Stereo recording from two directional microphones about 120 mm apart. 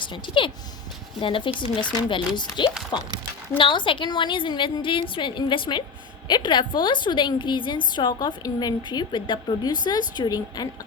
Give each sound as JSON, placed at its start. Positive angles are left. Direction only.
{"t": 0.0, "sound": "a woman's voice", "side_deg": 45}